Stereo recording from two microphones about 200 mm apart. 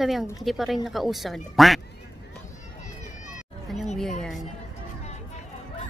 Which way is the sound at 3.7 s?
Centre (ahead or behind).